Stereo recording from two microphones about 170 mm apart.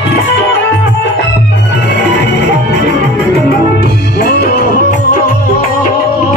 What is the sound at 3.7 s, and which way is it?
Music, 70° left (ahead or behind).